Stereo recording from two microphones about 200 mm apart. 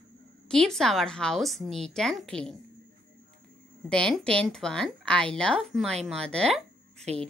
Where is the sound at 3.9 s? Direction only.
5° left (ahead or behind).